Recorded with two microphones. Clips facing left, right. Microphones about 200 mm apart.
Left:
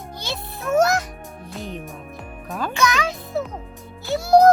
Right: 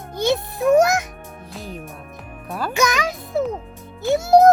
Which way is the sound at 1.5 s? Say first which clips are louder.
Left 2 dB; centre (ahead or behind).